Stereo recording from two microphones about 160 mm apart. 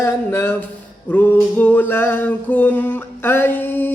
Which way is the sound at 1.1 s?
10° left (ahead or behind).